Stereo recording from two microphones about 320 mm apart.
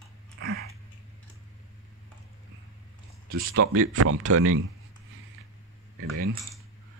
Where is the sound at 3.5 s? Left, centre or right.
Right.